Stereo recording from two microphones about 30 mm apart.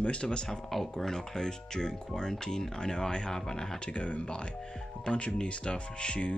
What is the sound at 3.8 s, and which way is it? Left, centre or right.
Speech, left.